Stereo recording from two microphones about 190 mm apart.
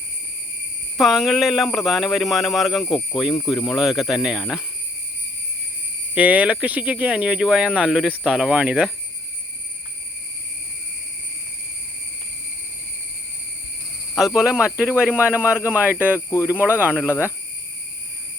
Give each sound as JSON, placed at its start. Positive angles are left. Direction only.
{"t": 0.9, "sound": "speech", "side_deg": 0}
{"t": 2.8, "sound": "speech", "side_deg": 20}
{"t": 3.5, "sound": "speech", "side_deg": 0}
{"t": 6.1, "sound": "speech", "side_deg": -5}
{"t": 14.2, "sound": "speech", "side_deg": -5}
{"t": 16.1, "sound": "speech", "side_deg": 15}